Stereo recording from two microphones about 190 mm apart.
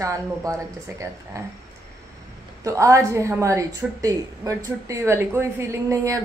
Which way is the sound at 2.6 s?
15° right (ahead or behind).